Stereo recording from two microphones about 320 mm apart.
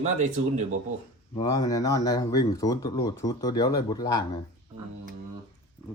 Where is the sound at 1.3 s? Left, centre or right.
Centre.